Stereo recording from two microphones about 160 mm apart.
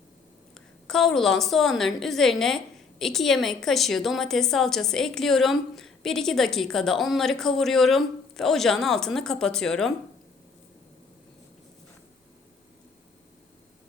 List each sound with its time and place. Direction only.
0.9 s a woman's voice: centre (ahead or behind)